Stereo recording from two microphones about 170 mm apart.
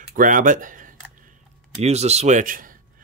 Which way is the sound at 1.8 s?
40° right (ahead or behind).